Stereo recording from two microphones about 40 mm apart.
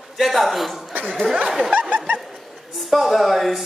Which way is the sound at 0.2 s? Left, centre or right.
Centre.